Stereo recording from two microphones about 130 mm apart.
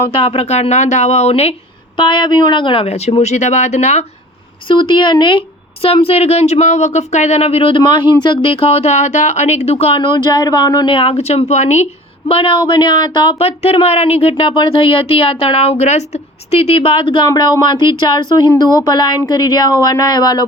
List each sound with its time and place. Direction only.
0.1 s speech: 45° left (ahead or behind)
2.0 s speech: 40° left (ahead or behind); by 4.0 s 60° left (ahead or behind)
4.7 s speech: 40° left (ahead or behind); by 11.9 s 60° left (ahead or behind)
12.3 s speech: 45° left (ahead or behind)
13.4 s speech: 50° left (ahead or behind); by 20.5 s 30° left (ahead or behind)